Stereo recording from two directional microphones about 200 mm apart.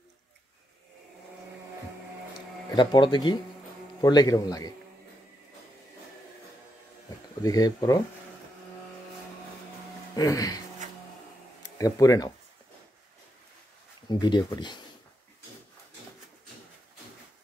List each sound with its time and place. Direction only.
2.7 s speech: 25° left (ahead or behind)
7.4 s speech: 15° left (ahead or behind)
10.1 s speech: 15° left (ahead or behind)
11.6 s speech: 15° left (ahead or behind)
14.0 s speech: 20° left (ahead or behind)